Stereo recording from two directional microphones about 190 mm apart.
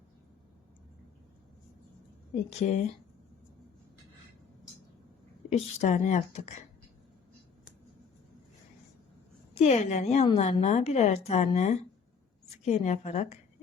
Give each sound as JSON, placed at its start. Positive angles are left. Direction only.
{"t": 2.5, "sound": "a woman's voice", "side_deg": 35}
{"t": 5.5, "sound": "a woman's voice", "side_deg": 35}
{"t": 9.6, "sound": "a woman's voice", "side_deg": 35}